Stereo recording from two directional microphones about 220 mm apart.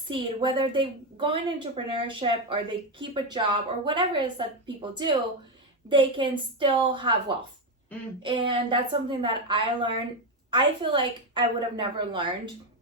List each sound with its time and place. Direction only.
0.1 s a woman's voice: 20° right (ahead or behind)
8.2 s a woman's voice: 20° right (ahead or behind)